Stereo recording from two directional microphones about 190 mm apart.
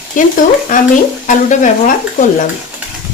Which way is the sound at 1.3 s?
40° left (ahead or behind).